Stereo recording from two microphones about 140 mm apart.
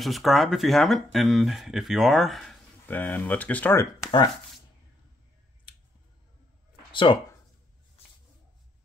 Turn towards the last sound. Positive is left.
turn(degrees=35)  # may be behind; listen again after turning